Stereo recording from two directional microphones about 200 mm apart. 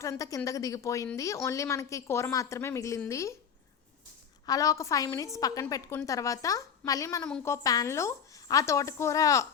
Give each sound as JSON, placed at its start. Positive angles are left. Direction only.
{"t": 0.0, "sound": "a woman's voice", "side_deg": 15}
{"t": 4.4, "sound": "a woman's voice", "side_deg": 15}